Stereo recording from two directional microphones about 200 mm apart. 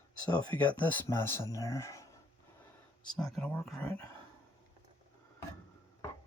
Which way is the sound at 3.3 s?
5° left (ahead or behind).